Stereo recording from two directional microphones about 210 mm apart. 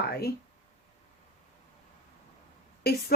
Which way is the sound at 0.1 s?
50° left (ahead or behind).